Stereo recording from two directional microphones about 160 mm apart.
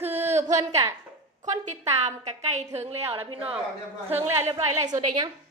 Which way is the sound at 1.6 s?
45° right (ahead or behind).